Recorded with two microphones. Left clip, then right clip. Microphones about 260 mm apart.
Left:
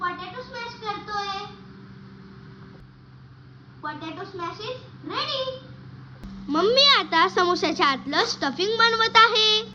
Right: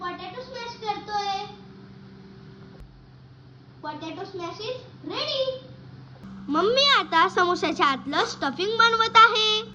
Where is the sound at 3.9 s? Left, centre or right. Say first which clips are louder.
Left 1 dB; centre.